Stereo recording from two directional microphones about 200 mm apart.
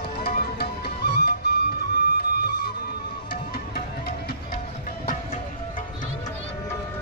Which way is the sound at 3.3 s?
50° left (ahead or behind).